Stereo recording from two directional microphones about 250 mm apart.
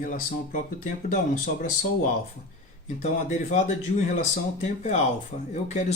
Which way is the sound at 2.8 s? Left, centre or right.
Left.